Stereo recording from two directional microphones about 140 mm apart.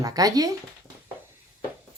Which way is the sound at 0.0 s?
25° right (ahead or behind).